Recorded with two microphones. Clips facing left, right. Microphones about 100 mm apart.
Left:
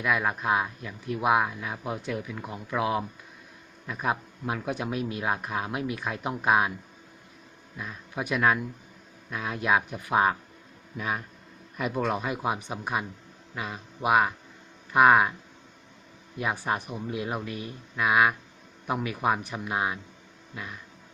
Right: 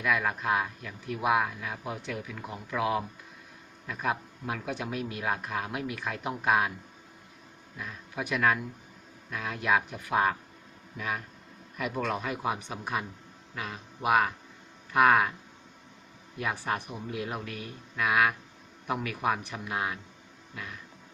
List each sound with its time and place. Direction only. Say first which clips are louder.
0.0 s a man's voice: left 2 dB; 20° left (ahead or behind)
7.8 s a man's voice: left 2 dB; 20° left (ahead or behind)
16.4 s a man's voice: left 3 dB; 15° left (ahead or behind)